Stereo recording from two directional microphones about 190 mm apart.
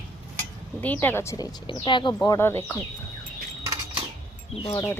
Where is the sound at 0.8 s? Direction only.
10° left (ahead or behind).